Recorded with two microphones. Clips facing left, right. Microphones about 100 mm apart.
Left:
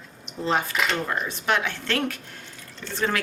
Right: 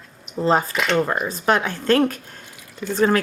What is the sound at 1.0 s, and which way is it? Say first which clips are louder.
A woman's voice: right 5 dB; 40° right (ahead or behind).